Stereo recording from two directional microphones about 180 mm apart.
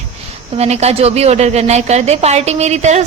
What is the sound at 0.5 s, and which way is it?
A woman's voice, 35° right (ahead or behind).